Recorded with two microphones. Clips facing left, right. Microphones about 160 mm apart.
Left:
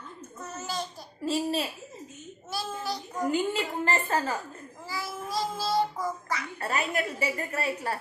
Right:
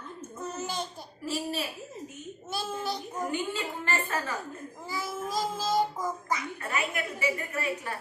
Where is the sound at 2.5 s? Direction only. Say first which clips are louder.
Even; 25° right (ahead or behind).